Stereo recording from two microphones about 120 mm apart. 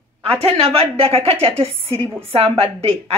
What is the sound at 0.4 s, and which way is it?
A man's voice, 55° right (ahead or behind).